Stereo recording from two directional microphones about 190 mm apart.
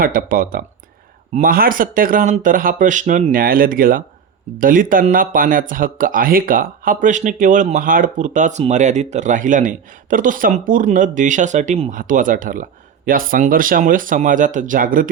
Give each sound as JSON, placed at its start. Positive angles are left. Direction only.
{"t": 0.0, "sound": "speech", "side_deg": -50}